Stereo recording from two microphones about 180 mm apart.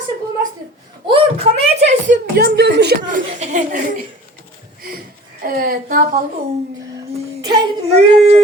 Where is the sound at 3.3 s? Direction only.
40° right (ahead or behind).